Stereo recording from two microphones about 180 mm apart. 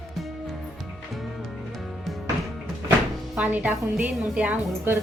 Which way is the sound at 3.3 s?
10° right (ahead or behind).